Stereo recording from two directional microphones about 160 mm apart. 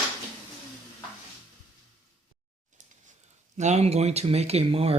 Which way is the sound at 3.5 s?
45° right (ahead or behind).